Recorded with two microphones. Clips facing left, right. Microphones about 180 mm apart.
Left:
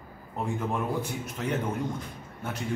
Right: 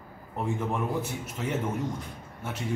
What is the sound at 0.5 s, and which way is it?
A man's voice, 5° right (ahead or behind).